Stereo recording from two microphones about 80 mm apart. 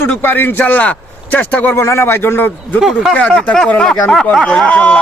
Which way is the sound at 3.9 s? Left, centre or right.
Centre.